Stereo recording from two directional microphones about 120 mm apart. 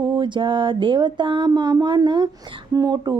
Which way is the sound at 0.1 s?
40° right (ahead or behind).